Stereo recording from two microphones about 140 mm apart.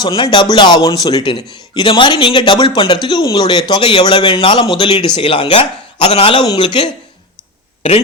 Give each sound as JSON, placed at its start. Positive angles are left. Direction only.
{"t": 0.0, "sound": "a man's voice", "side_deg": 30}
{"t": 7.8, "sound": "speech", "side_deg": 45}